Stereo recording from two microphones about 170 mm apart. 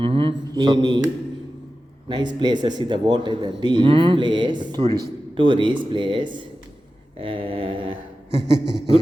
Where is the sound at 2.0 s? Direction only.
25° right (ahead or behind).